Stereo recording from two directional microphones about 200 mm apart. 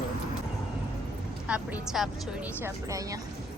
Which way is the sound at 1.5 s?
5° right (ahead or behind).